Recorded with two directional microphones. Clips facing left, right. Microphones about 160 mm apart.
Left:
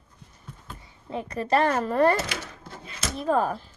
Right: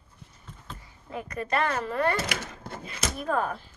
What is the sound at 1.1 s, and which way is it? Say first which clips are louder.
Speech: left 5 dB; 30° left (ahead or behind).